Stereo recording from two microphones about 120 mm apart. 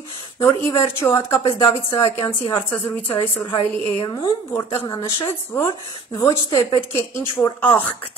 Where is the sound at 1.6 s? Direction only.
30° left (ahead or behind).